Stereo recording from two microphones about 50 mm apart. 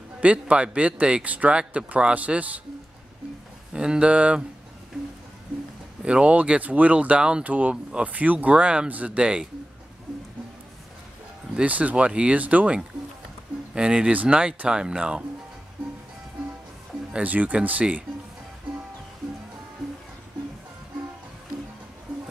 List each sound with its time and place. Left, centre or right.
0.2 s speech: right
3.7 s speech: centre
6.0 s speech: right
11.6 s speech: right
17.2 s speech: right